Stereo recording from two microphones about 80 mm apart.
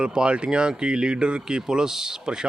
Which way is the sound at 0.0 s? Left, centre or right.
Centre.